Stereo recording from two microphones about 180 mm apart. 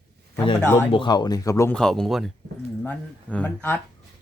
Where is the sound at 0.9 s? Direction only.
25° left (ahead or behind).